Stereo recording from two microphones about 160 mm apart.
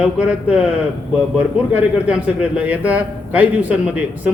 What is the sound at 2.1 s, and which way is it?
Speech, 10° right (ahead or behind).